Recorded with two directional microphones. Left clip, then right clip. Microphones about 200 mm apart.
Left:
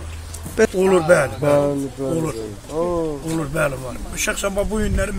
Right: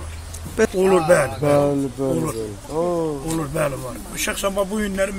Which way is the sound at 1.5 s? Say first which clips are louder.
Even; 40° right (ahead or behind).